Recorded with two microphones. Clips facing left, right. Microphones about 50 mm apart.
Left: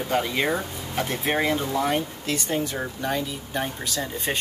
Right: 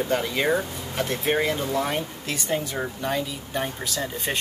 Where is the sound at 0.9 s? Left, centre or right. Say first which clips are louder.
Right 1 dB; centre.